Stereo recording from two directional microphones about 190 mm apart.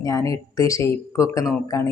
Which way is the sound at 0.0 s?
15° left (ahead or behind).